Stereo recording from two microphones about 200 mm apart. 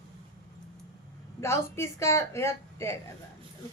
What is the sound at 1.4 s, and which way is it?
A woman's voice, 15° left (ahead or behind).